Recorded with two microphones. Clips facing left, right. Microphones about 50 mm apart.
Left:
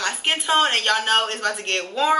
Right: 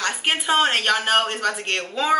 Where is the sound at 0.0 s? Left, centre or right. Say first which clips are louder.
Right 1 dB; centre.